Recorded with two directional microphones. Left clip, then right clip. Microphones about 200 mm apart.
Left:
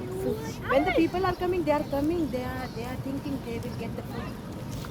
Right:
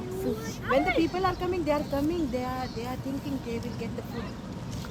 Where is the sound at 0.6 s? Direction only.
55° right (ahead or behind).